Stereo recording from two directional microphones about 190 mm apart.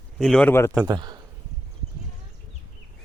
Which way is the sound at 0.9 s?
20° right (ahead or behind).